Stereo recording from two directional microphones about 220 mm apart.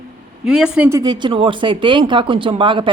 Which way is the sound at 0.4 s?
5° right (ahead or behind).